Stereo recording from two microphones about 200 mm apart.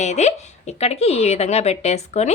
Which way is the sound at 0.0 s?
35° left (ahead or behind).